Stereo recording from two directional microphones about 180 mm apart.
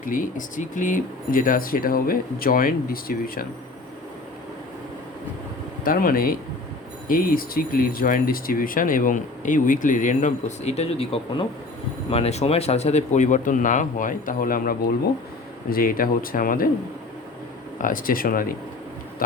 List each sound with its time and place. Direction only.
0.0 s speech: 50° left (ahead or behind)
5.8 s speech: 50° left (ahead or behind)
17.7 s speech: 50° left (ahead or behind)